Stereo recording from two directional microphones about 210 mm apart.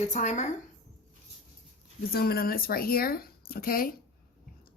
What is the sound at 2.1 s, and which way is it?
A woman's voice, 45° left (ahead or behind).